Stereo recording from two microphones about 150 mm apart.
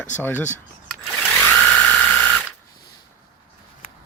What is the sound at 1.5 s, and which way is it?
Ratchet, 10° left (ahead or behind).